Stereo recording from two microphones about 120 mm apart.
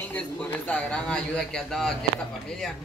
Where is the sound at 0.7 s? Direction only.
5° left (ahead or behind).